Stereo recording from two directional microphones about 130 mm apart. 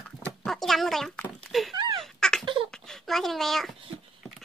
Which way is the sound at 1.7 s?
35° right (ahead or behind).